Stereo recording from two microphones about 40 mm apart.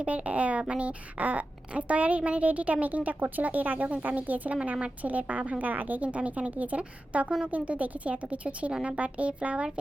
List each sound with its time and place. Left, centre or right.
0.0 s a woman's voice: right
8.7 s speech: right
9.0 s a woman's voice: right